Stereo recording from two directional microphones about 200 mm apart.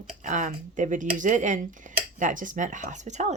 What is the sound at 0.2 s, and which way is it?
Speech, 40° right (ahead or behind).